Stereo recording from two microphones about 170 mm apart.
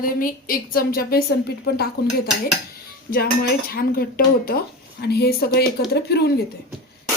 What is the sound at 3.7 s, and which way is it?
A woman's voice, 65° left (ahead or behind).